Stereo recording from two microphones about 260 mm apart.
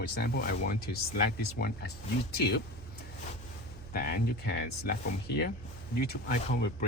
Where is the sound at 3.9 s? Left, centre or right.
Left.